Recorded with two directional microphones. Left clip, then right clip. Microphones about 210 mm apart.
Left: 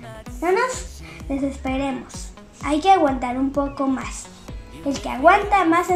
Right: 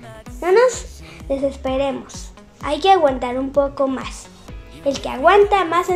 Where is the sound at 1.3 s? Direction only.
50° right (ahead or behind).